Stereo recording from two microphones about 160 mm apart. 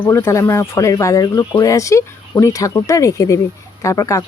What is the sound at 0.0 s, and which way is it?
Speech, 15° left (ahead or behind).